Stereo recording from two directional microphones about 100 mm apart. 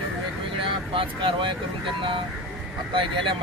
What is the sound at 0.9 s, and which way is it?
Speech, 55° right (ahead or behind).